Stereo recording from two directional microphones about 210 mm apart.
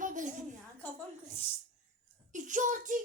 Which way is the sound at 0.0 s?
40° right (ahead or behind).